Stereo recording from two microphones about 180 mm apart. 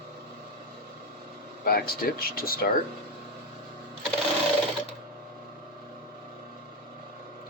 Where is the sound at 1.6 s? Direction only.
55° left (ahead or behind).